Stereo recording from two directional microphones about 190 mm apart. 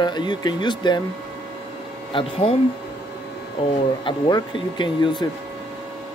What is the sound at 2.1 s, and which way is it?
Speech, 30° left (ahead or behind).